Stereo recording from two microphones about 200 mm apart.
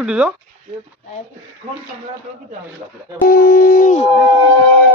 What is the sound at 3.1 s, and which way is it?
Music, 50° left (ahead or behind).